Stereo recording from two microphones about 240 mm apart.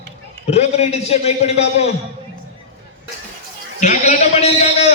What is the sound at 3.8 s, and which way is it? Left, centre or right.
A man's voice, left.